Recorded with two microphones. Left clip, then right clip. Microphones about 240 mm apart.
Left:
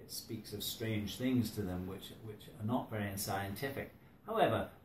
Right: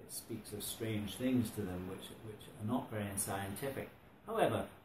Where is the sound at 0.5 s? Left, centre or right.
Centre.